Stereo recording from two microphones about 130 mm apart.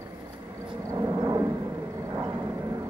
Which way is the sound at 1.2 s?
30° right (ahead or behind).